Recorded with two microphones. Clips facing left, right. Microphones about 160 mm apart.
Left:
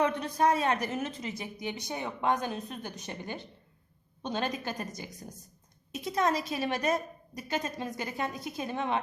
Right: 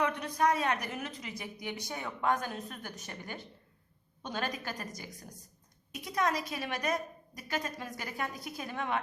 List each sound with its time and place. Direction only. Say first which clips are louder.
0.0 s a woman's voice: left 3 dB; 30° left (ahead or behind)
5.9 s a woman's voice: left 3 dB; 25° left (ahead or behind)